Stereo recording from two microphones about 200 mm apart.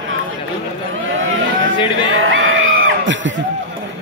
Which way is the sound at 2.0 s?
75° right (ahead or behind).